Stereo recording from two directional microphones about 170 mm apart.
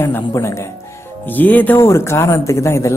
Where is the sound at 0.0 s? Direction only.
15° left (ahead or behind).